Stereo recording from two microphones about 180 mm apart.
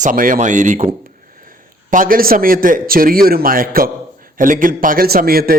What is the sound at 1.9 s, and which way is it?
A man's voice, 50° right (ahead or behind).